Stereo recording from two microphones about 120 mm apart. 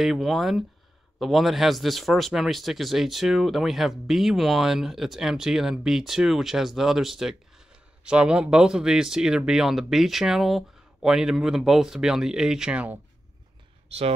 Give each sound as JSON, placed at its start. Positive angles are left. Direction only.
{"t": 0.0, "sound": "speech", "side_deg": 0}
{"t": 13.8, "sound": "speech", "side_deg": -55}